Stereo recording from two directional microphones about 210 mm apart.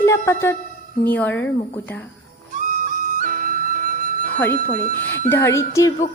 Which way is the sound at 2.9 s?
40° right (ahead or behind).